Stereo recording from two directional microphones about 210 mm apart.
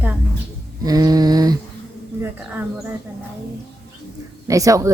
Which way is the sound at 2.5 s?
5° right (ahead or behind).